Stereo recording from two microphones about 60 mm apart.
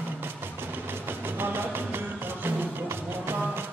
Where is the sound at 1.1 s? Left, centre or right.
Right.